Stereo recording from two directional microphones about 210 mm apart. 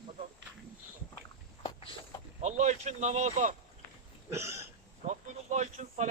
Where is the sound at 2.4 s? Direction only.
35° right (ahead or behind).